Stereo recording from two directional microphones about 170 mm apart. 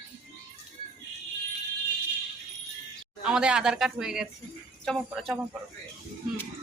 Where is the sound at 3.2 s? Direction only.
5° right (ahead or behind).